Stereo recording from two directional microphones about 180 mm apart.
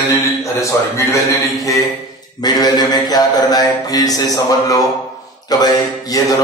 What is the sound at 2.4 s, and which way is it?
A man's voice, 20° left (ahead or behind).